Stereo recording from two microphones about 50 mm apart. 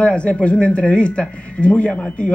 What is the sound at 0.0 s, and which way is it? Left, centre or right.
Speech, left.